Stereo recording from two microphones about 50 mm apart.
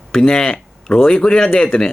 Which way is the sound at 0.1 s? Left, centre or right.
Centre.